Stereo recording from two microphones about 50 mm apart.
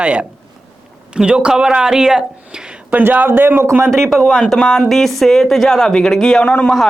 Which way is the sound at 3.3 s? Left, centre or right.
Right.